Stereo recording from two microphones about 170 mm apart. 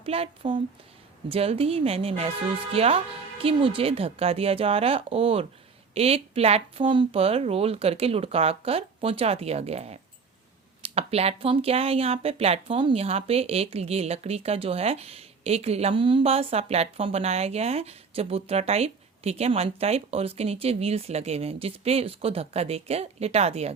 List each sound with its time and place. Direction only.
0.0 s speech: 35° right (ahead or behind)